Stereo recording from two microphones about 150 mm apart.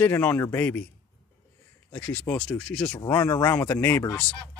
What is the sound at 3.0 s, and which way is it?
Speech, 20° left (ahead or behind).